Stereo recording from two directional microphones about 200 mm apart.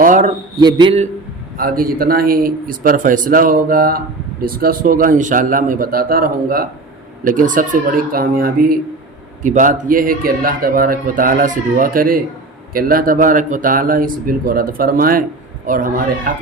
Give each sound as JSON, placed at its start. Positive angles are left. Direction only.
{"t": 0.0, "sound": "a sound", "side_deg": -40}
{"t": 0.5, "sound": "a man's voice", "side_deg": -20}
{"t": 1.5, "sound": "a man's voice", "side_deg": -45}